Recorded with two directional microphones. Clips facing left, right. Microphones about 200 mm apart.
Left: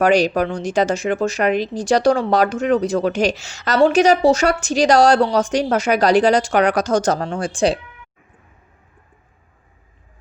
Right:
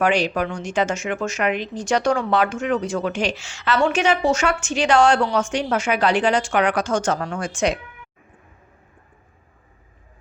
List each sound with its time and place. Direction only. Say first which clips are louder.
0.0 s speech: left 5 dB; 40° left (ahead or behind)